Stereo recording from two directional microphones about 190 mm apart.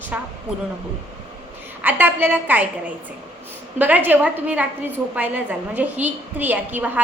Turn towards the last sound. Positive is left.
turn(degrees=-10)  # may be behind; listen again after turning